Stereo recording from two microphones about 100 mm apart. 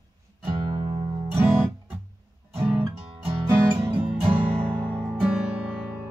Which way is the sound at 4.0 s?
15° right (ahead or behind).